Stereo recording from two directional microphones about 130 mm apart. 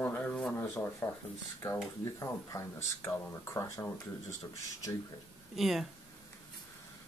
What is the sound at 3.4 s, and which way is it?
Speech, 20° left (ahead or behind).